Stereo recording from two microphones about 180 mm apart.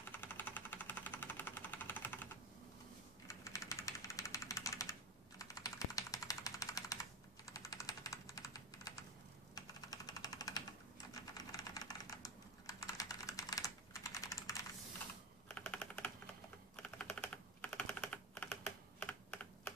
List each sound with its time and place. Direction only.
0.2 s engine: 10° left (ahead or behind)
3.3 s engine: 15° left (ahead or behind)
5.4 s a sound: 20° left (ahead or behind)
7.5 s typing: 20° left (ahead or behind)
9.6 s a sound: 20° left (ahead or behind)
11.3 s typing: 20° left (ahead or behind)
15.4 s typing: 5° left (ahead or behind)